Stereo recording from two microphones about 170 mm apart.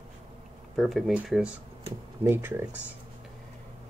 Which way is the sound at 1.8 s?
15° right (ahead or behind).